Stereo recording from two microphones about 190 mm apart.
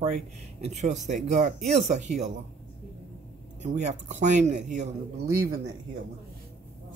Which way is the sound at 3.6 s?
40° right (ahead or behind).